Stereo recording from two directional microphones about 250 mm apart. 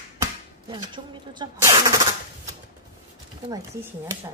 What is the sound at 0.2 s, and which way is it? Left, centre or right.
Speech, centre.